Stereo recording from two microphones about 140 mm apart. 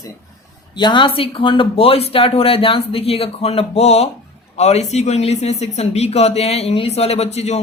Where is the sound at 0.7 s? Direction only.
35° left (ahead or behind).